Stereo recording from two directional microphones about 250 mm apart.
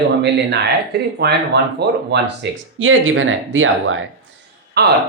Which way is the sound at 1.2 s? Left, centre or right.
Right.